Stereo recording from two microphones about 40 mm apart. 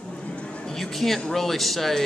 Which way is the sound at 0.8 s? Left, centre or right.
Centre.